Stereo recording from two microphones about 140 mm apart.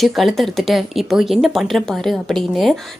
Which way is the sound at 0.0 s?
Centre (ahead or behind).